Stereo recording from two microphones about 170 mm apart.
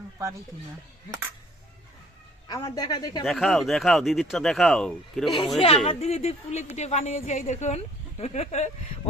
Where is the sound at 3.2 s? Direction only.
Centre (ahead or behind).